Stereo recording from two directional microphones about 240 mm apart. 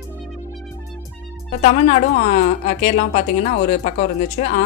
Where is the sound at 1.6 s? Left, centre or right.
Left.